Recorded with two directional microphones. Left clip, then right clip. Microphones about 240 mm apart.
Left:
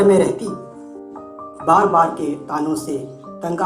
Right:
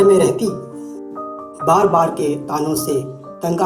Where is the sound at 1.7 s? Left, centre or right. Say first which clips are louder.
Even; right.